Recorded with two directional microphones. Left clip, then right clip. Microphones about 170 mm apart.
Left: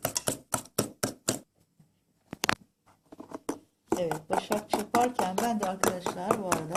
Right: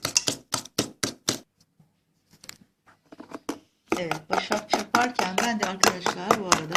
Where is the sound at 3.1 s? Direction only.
5° right (ahead or behind).